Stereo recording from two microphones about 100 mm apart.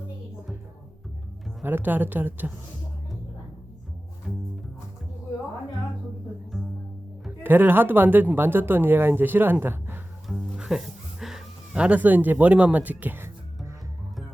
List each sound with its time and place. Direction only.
1.6 s speech: 20° right (ahead or behind)
7.4 s speech: 20° right (ahead or behind)
10.6 s speech: 5° right (ahead or behind); by 13.3 s 20° right (ahead or behind)